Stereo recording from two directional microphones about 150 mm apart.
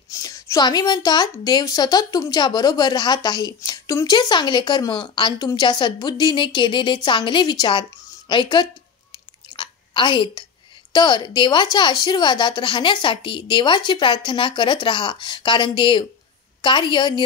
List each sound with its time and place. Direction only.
0.1 s a woman's voice: 20° left (ahead or behind)
9.6 s a sound: 30° left (ahead or behind)
10.9 s a woman's voice: 30° left (ahead or behind)